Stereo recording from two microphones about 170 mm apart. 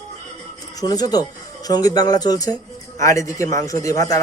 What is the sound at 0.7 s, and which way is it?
A man's voice, 20° left (ahead or behind).